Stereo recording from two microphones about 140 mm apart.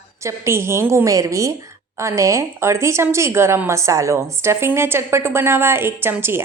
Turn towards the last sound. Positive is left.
turn(degrees=-15)  # may be behind; listen again after turning